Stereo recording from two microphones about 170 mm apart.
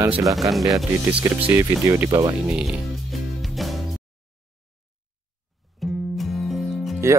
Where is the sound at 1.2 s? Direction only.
15° right (ahead or behind).